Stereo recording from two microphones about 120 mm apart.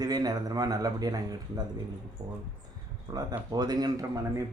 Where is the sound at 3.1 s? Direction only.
35° right (ahead or behind).